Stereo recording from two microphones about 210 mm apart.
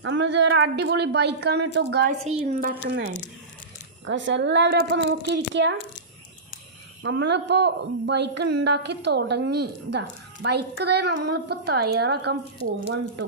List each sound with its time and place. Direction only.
0.0 s a woman's voice: 55° right (ahead or behind)
2.3 s a woman's voice: 40° right (ahead or behind)
4.0 s a woman's voice: 60° right (ahead or behind)
7.0 s a woman's voice: 55° right (ahead or behind)